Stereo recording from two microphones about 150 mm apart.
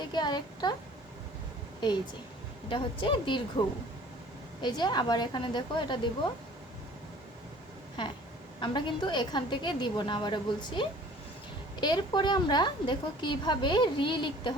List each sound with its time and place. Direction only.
0.0 s a woman's voice: 30° left (ahead or behind)
2.6 s a woman's voice: 35° left (ahead or behind)
8.6 s a woman's voice: 30° left (ahead or behind)